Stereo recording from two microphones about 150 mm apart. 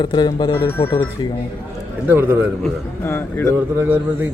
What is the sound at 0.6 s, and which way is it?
Speech, 15° left (ahead or behind).